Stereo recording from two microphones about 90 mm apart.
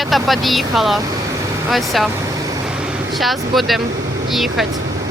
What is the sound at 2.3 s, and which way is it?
Vehicle, 40° right (ahead or behind).